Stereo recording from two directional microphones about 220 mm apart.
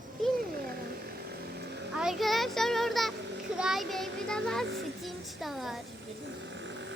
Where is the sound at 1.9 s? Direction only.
5° right (ahead or behind).